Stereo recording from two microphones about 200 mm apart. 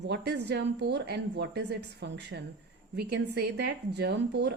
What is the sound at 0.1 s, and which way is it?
A woman's voice, 60° right (ahead or behind).